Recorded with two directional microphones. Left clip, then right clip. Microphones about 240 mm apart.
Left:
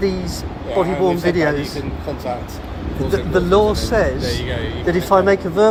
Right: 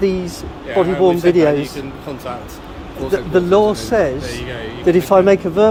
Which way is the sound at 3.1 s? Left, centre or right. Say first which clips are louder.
Right 2 dB; right.